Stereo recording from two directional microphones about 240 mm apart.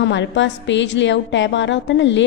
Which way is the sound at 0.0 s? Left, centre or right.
Left.